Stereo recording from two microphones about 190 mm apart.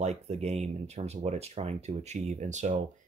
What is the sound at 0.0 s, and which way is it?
Speech, 35° right (ahead or behind).